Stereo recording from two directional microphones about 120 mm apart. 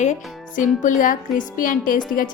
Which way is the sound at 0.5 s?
90° left.